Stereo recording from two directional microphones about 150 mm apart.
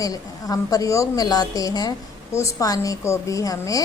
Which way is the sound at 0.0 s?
25° left (ahead or behind).